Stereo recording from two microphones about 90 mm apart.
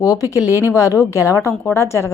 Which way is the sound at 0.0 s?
40° left (ahead or behind).